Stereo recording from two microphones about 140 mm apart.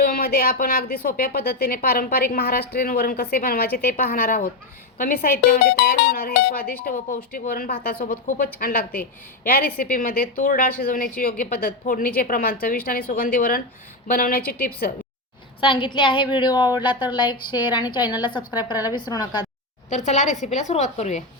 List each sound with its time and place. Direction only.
0.0 s a woman's voice: 90° left
15.6 s a woman's voice: 35° left (ahead or behind)
19.9 s a woman's voice: 60° left (ahead or behind)